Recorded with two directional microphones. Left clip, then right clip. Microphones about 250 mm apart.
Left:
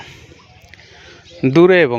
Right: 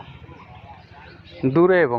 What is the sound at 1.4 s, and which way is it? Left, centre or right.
Speech, left.